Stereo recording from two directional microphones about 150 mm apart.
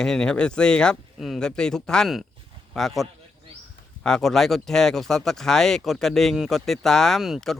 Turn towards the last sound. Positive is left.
turn(degrees=0)  # may be behind; listen again after turning